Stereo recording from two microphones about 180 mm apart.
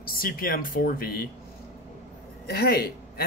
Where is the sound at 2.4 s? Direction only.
60° left (ahead or behind).